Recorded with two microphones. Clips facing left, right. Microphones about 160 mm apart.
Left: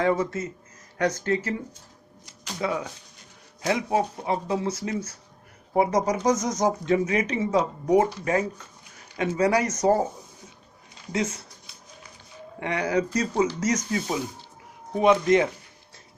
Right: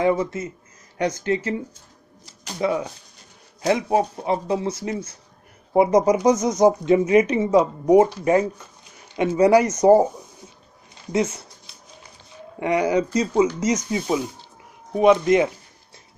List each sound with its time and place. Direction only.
0.0 s speech: 15° right (ahead or behind)
3.6 s speech: 35° right (ahead or behind)
6.2 s speech: 60° right (ahead or behind)
6.5 s speech: 30° right (ahead or behind)
12.5 s speech: 15° right (ahead or behind)
15.0 s speech: 20° right (ahead or behind)